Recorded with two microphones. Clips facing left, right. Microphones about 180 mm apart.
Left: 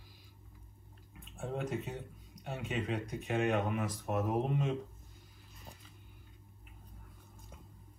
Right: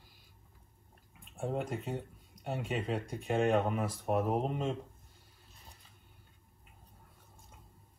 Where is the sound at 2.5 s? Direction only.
35° right (ahead or behind).